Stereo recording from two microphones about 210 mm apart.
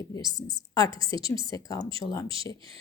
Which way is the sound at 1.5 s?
15° left (ahead or behind).